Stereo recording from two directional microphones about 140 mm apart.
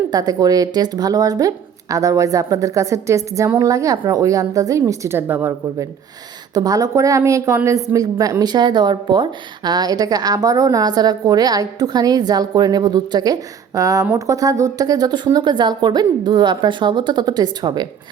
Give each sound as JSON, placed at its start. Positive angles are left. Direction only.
{"t": 0.1, "sound": "a woman's voice", "side_deg": -30}
{"t": 6.5, "sound": "a woman's voice", "side_deg": -25}